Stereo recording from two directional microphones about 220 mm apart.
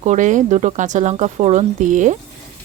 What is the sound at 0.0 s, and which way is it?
Speech, 35° right (ahead or behind).